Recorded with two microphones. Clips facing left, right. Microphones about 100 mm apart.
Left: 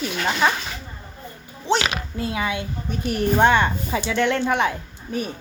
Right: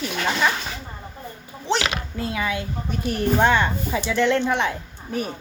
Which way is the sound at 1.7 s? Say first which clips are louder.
Left 2 dB; 20° left (ahead or behind).